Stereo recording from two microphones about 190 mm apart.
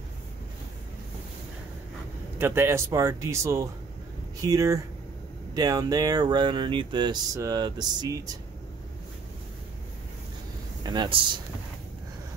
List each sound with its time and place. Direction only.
2.3 s speech: 10° right (ahead or behind)
10.8 s a man's voice: 20° right (ahead or behind)